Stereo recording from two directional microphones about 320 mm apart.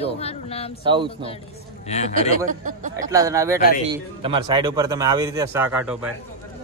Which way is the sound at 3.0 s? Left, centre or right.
Centre.